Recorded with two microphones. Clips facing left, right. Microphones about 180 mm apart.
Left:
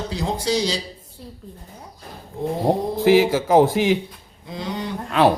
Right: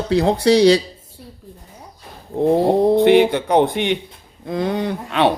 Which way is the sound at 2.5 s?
65° right (ahead or behind).